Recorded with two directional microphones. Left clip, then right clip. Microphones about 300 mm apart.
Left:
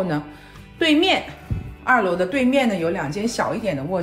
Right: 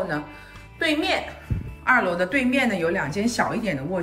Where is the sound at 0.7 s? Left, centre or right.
Centre.